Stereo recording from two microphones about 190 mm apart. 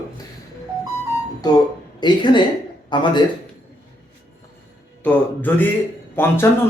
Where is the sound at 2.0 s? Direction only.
25° left (ahead or behind).